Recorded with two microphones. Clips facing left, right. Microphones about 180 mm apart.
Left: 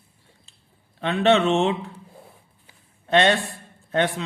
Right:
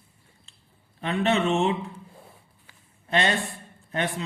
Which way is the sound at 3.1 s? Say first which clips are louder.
Left 6 dB; 80° left.